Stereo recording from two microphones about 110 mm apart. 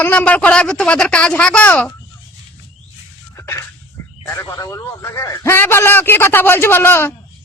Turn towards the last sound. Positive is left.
turn(degrees=20)  # may be behind; listen again after turning